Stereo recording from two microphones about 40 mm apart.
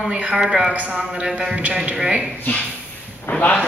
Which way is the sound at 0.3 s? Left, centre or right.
Centre.